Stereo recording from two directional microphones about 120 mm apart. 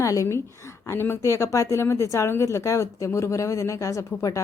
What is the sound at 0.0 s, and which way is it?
A woman's voice, 25° left (ahead or behind).